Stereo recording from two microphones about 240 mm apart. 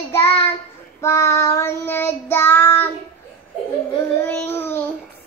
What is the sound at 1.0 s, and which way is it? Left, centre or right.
Child singing, centre.